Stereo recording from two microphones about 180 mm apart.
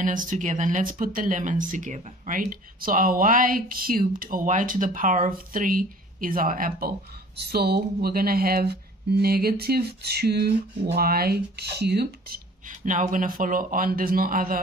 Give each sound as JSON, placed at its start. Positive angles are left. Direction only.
{"t": 0.0, "sound": "speech", "side_deg": -45}
{"t": 7.3, "sound": "speech", "side_deg": -60}